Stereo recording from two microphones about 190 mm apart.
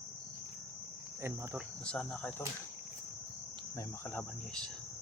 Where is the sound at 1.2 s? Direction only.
15° right (ahead or behind).